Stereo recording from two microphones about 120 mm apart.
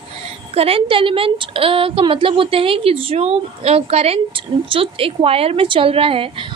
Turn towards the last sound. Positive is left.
turn(degrees=-50)  # may be behind; listen again after turning